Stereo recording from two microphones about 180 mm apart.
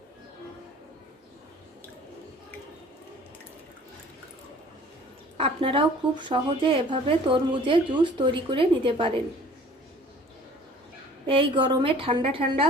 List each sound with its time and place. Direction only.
5.4 s speech: 30° right (ahead or behind)
11.3 s speech: 30° right (ahead or behind)